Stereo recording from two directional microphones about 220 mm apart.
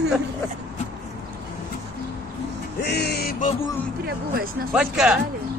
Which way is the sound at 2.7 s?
50° left (ahead or behind).